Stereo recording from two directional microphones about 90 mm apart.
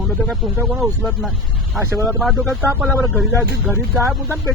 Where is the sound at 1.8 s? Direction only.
30° right (ahead or behind).